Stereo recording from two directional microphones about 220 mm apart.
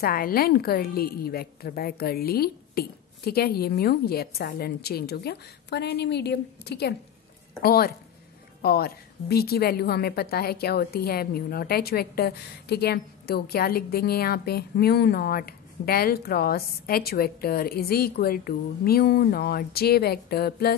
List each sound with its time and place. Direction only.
0.0 s a woman's voice: 40° left (ahead or behind)